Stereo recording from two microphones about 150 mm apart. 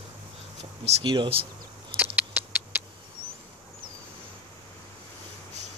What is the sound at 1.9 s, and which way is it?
Rodents, 10° right (ahead or behind).